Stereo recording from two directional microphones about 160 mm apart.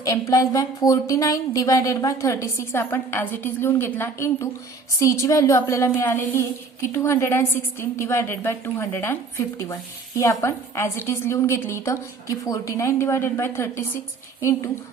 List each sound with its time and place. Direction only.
0.0 s a woman's voice: 20° left (ahead or behind)
10.2 s a woman's voice: 15° left (ahead or behind)